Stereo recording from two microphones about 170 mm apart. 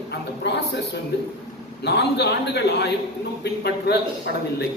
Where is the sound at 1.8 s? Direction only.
80° left.